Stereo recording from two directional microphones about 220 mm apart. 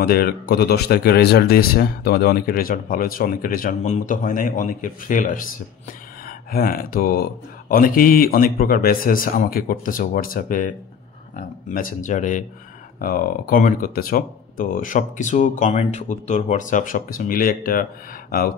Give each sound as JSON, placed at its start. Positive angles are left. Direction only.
{"t": 0.0, "sound": "speech", "side_deg": 45}